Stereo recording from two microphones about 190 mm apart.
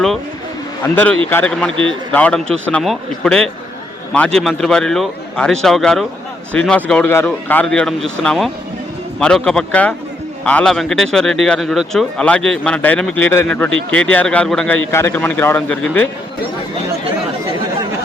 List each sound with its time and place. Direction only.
1.3 s speech: 10° left (ahead or behind)
1.7 s a man's voice: 25° right (ahead or behind)
2.1 s speech: 5° left (ahead or behind)